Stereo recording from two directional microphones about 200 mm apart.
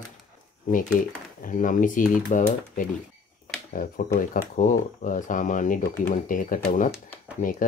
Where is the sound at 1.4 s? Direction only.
40° left (ahead or behind).